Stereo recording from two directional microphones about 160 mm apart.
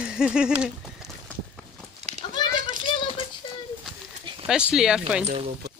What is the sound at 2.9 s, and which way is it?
Music, 30° left (ahead or behind).